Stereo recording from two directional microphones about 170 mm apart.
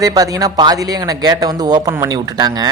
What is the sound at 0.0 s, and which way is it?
Speech, 20° right (ahead or behind).